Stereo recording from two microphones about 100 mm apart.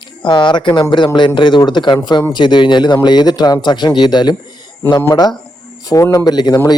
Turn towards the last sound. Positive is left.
turn(degrees=45)  # may be behind; listen again after turning